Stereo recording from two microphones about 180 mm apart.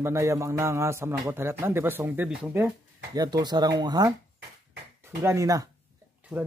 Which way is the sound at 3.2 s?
20° right (ahead or behind).